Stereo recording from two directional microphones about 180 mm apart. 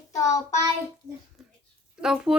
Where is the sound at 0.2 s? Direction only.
15° left (ahead or behind).